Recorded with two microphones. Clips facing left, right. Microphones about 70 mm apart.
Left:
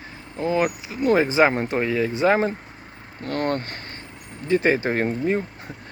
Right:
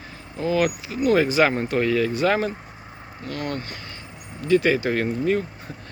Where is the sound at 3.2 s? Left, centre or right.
Left.